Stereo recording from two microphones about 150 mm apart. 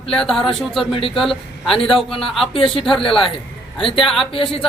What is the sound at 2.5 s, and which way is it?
Speech, 35° left (ahead or behind).